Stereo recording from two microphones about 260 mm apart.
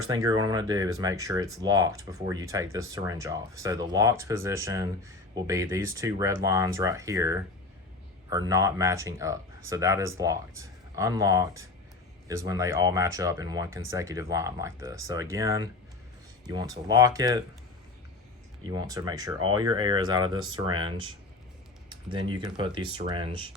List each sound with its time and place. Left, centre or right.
0.1 s speech: centre
18.6 s speech: centre